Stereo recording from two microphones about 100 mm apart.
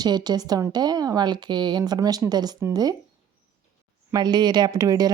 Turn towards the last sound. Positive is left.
turn(degrees=-35)  # may be behind; listen again after turning